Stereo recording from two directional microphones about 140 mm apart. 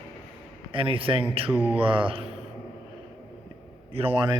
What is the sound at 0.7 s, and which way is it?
Speech, 40° right (ahead or behind).